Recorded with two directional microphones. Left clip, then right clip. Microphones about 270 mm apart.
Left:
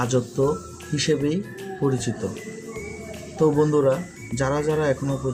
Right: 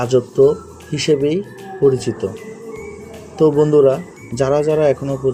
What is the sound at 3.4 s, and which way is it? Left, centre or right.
Speech, centre.